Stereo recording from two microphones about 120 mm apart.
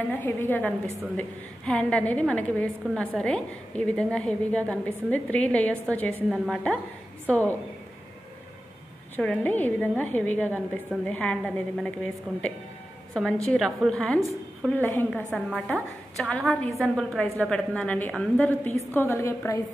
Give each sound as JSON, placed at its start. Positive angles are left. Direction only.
{"t": 0.1, "sound": "a woman's voice", "side_deg": 15}
{"t": 6.3, "sound": "a woman's voice", "side_deg": -5}
{"t": 7.2, "sound": "a woman's voice", "side_deg": 15}
{"t": 9.1, "sound": "a woman's voice", "side_deg": 10}
{"t": 15.3, "sound": "a woman's voice", "side_deg": 5}